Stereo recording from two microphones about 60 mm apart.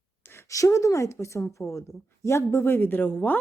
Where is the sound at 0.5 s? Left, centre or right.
Left.